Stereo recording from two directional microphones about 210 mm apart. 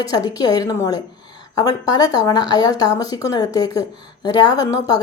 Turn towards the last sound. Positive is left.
turn(degrees=15)  # may be behind; listen again after turning